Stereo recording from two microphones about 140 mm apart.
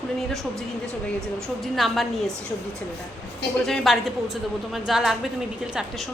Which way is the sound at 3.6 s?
Centre (ahead or behind).